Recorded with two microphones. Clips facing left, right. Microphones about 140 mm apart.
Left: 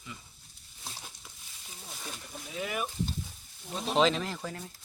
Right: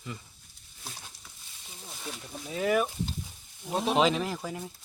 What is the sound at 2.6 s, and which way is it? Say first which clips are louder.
Speech: right 9 dB; 45° right (ahead or behind).